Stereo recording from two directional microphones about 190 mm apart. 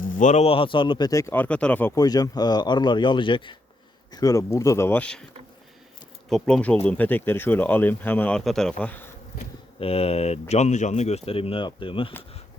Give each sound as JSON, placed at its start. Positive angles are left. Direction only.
{"t": 0.0, "sound": "speech", "side_deg": 45}
{"t": 2.0, "sound": "speech", "side_deg": 20}
{"t": 6.2, "sound": "speech", "side_deg": 5}
{"t": 9.8, "sound": "speech", "side_deg": 30}